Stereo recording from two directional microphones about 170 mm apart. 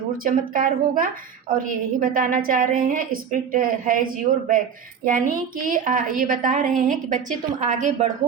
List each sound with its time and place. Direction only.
0.3 s a woman's voice: 55° right (ahead or behind)